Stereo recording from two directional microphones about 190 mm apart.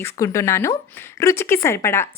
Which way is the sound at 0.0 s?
15° left (ahead or behind).